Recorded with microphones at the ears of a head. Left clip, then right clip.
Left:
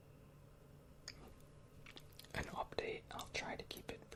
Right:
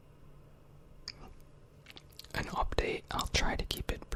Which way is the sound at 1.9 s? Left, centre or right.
Right.